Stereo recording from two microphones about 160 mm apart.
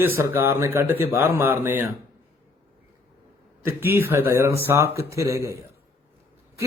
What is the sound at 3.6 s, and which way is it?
A man's voice, 15° right (ahead or behind).